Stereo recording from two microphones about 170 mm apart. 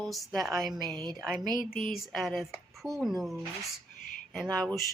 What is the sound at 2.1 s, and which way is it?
A woman's voice, centre (ahead or behind).